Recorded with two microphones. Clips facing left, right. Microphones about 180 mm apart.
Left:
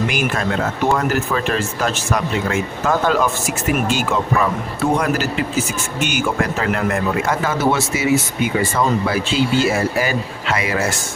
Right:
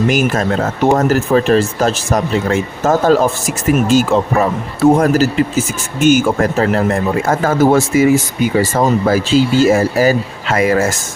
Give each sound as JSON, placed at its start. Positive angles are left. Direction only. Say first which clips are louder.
{"t": 0.1, "sound": "speech", "louder": "right 6 dB", "side_deg": -40}
{"t": 7.3, "sound": "speech", "louder": "right 9 dB", "side_deg": -45}
{"t": 8.4, "sound": "speech", "louder": "right 5 dB", "side_deg": -35}